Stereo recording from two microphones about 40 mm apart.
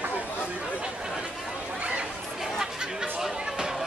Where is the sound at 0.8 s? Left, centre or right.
Centre.